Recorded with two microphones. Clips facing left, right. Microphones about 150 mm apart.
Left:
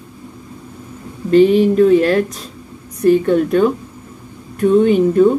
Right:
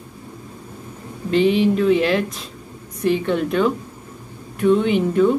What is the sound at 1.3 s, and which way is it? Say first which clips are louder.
Speech: left 6 dB; 45° left (ahead or behind).